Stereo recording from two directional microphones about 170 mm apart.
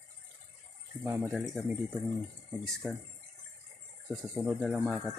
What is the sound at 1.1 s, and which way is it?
Speech, 5° right (ahead or behind).